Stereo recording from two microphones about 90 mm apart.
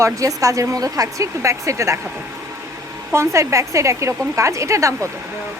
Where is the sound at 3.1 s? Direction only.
30° right (ahead or behind).